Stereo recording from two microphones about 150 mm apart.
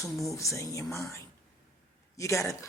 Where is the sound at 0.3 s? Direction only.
20° left (ahead or behind).